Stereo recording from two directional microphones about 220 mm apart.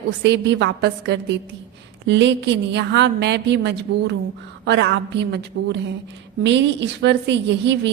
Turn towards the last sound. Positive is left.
turn(degrees=-50)  # may be behind; listen again after turning